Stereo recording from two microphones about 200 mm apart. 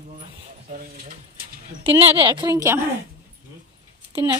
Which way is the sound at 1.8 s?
25° right (ahead or behind).